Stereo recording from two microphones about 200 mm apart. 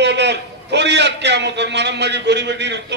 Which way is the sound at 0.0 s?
60° right (ahead or behind).